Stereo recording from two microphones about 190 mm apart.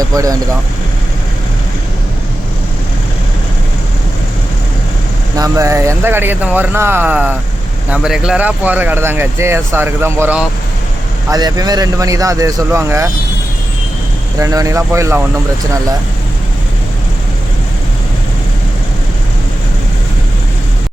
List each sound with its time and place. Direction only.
0.1 s speech: 20° right (ahead or behind)
5.4 s speech: 15° right (ahead or behind)
14.3 s speech: 15° right (ahead or behind)